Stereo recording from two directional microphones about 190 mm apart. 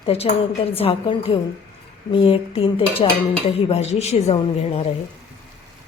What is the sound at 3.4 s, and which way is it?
A woman's voice, 35° left (ahead or behind).